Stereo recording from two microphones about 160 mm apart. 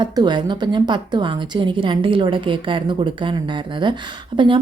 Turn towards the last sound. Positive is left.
turn(degrees=-30)  # may be behind; listen again after turning